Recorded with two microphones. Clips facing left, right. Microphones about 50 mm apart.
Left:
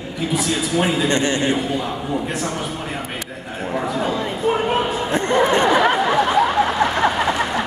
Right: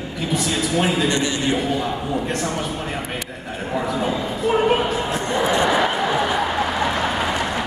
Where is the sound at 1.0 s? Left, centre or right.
Left.